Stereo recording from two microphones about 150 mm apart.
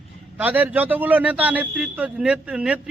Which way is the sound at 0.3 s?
10° right (ahead or behind).